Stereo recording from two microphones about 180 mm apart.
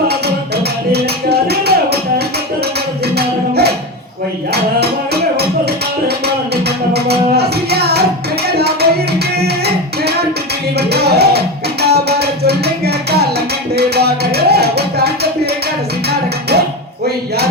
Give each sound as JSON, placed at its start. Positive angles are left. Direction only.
{"t": 0.1, "sound": "music", "side_deg": -60}
{"t": 5.4, "sound": "music", "side_deg": -65}